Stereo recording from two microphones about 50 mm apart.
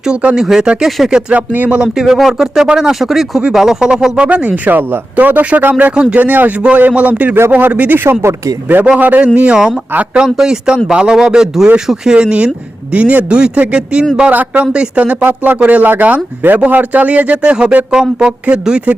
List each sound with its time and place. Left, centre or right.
0.2 s speech: right
0.4 s speech: centre
1.3 s speech: right
1.7 s speech: centre
4.3 s speech: right
5.9 s speech: right
6.1 s speech: right
7.9 s speech: right
8.2 s speech: right
8.6 s speech: right
9.6 s speech: centre
14.3 s speech: right